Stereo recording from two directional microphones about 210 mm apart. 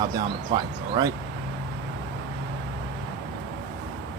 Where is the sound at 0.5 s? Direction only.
20° right (ahead or behind).